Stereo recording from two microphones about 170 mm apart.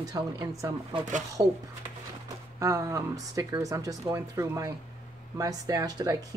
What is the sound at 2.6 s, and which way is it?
Speech, 20° right (ahead or behind).